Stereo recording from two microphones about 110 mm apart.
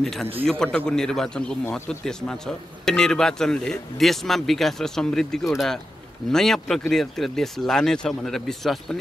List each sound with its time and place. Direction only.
0.0 s a man's voice: 5° left (ahead or behind)